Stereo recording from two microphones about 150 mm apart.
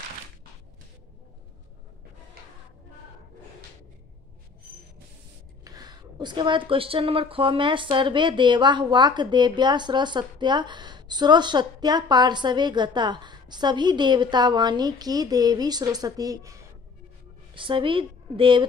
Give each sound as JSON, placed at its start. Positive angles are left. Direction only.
{"t": 5.6, "sound": "a woman's voice", "side_deg": -25}
{"t": 17.6, "sound": "a woman's voice", "side_deg": -35}